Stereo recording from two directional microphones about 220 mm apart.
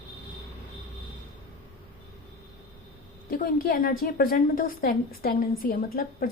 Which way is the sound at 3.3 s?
40° left (ahead or behind).